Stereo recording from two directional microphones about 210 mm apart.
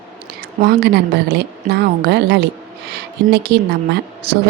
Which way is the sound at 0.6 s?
50° right (ahead or behind).